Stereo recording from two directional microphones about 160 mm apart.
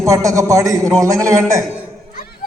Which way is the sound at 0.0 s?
20° right (ahead or behind).